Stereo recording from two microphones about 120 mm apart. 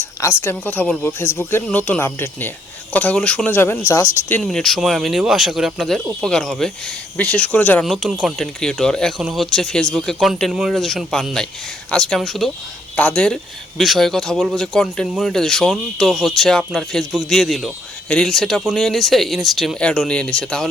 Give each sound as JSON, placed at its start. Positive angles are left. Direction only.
{"t": 0.0, "sound": "a woman's voice", "side_deg": 20}
{"t": 4.4, "sound": "speech", "side_deg": 0}
{"t": 7.9, "sound": "speech", "side_deg": 0}